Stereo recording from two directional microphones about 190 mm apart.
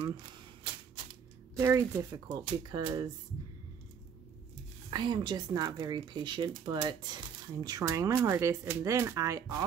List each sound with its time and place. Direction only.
1.6 s speech: 15° right (ahead or behind)
4.9 s speech: 20° right (ahead or behind)